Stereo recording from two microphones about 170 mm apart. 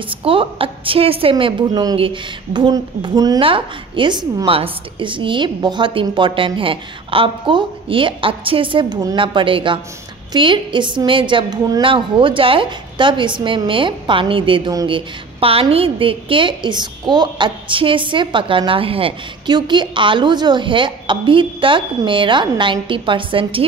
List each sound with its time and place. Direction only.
0.1 s a woman's voice: 30° right (ahead or behind)